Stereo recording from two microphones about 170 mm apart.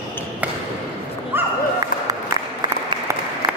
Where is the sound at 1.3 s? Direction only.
15° right (ahead or behind).